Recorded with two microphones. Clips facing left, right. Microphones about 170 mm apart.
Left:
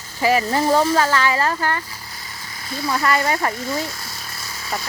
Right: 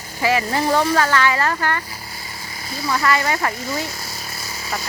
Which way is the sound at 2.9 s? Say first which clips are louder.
Even; 30° left (ahead or behind).